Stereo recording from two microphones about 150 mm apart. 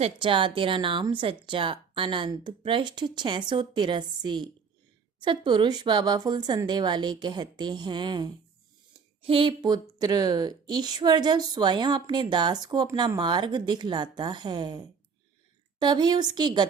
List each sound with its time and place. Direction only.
0.0 s a woman's voice: 35° right (ahead or behind)